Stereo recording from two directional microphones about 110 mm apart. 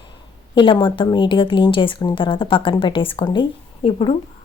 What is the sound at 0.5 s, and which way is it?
A woman's voice, 50° left (ahead or behind).